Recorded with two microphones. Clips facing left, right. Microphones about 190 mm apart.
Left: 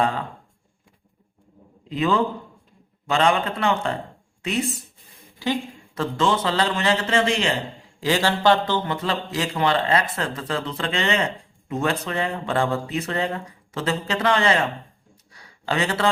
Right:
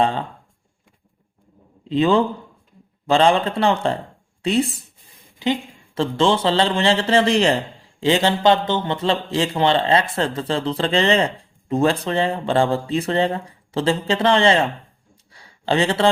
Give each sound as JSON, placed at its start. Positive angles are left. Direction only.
{"t": 0.0, "sound": "a man's voice", "side_deg": -25}
{"t": 1.9, "sound": "a man's voice", "side_deg": -30}
{"t": 8.0, "sound": "a man's voice", "side_deg": -25}
{"t": 15.3, "sound": "a sound", "side_deg": -30}